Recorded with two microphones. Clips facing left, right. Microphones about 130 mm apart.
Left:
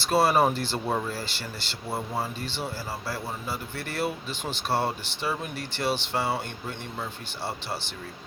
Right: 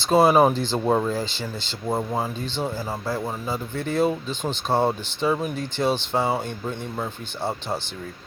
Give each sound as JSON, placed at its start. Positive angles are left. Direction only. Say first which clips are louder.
{"t": 0.1, "sound": "speech", "louder": "right 5 dB", "side_deg": -20}